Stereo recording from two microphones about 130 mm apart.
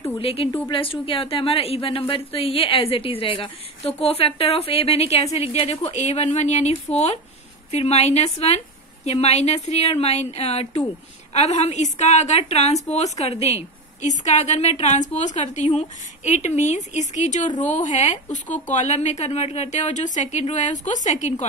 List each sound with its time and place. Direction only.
0.2 s a woman's voice: 45° left (ahead or behind)
7.7 s a woman's voice: 55° left (ahead or behind)